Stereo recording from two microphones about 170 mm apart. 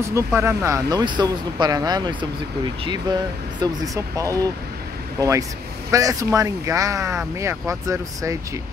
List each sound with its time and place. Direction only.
0.1 s speech: 15° right (ahead or behind)
5.9 s speech: 20° right (ahead or behind)